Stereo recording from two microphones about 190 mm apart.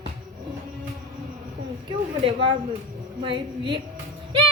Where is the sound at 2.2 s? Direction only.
25° right (ahead or behind).